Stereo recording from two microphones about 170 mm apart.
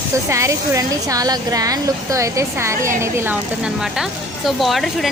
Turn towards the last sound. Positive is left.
turn(degrees=0)  # may be behind; listen again after turning